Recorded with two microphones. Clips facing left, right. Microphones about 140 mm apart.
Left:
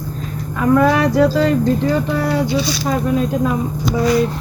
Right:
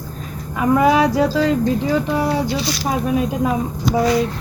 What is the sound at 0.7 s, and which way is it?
Speech, 10° right (ahead or behind).